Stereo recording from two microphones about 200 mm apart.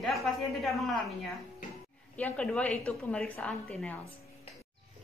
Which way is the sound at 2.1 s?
5° left (ahead or behind).